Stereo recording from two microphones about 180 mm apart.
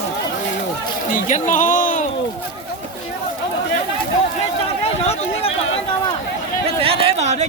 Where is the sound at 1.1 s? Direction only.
45° left (ahead or behind).